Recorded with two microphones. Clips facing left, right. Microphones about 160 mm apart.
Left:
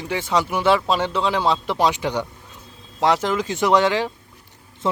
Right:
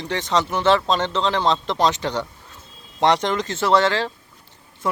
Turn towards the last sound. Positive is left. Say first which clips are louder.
# left 1 dB
turn(degrees=15)  # may be behind; listen again after turning